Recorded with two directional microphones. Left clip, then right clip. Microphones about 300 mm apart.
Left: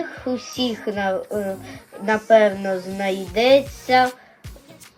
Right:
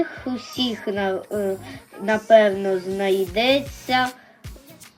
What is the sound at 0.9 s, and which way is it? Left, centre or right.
Speech, centre.